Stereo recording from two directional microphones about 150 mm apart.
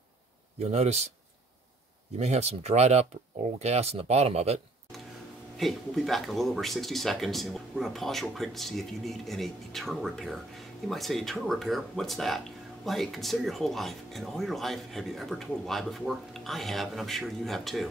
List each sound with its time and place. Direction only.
0.6 s speech: 45° right (ahead or behind)
2.1 s speech: 45° right (ahead or behind)
5.6 s speech: centre (ahead or behind)